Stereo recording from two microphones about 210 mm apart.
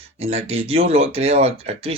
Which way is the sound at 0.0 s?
30° right (ahead or behind).